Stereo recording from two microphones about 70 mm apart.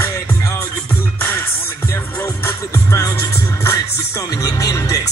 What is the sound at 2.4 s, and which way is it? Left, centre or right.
Music, left.